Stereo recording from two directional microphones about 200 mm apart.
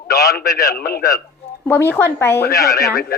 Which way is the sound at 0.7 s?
50° left (ahead or behind).